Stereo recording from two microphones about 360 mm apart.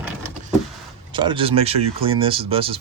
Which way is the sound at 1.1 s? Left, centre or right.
Centre.